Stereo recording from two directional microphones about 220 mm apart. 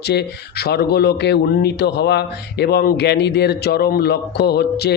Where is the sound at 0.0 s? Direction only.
50° left (ahead or behind).